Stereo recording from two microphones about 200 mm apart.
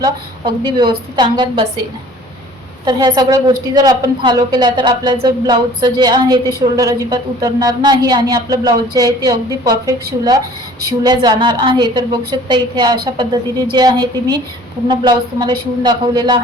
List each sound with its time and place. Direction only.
0.0 s a woman's voice: 20° right (ahead or behind)
2.8 s a woman's voice: 20° right (ahead or behind)